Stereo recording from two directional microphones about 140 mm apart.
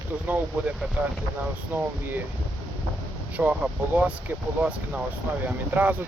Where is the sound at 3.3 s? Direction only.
10° right (ahead or behind).